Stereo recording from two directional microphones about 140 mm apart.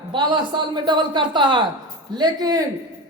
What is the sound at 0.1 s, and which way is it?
Speech, 35° right (ahead or behind).